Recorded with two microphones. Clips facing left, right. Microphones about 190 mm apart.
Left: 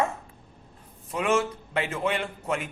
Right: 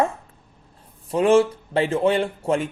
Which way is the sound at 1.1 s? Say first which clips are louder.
Right 9 dB; 30° right (ahead or behind).